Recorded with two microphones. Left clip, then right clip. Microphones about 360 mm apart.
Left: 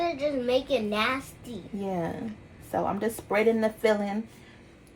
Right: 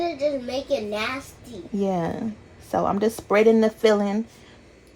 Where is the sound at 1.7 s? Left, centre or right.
Right.